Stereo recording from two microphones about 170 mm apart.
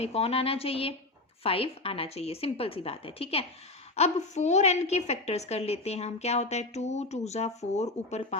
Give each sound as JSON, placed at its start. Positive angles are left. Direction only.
{"t": 0.0, "sound": "a woman's voice", "side_deg": 35}